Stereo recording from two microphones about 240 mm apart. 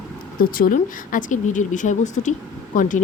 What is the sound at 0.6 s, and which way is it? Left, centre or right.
Speech, left.